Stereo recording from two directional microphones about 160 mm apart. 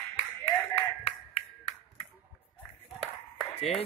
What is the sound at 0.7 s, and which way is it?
Clapping, 40° left (ahead or behind).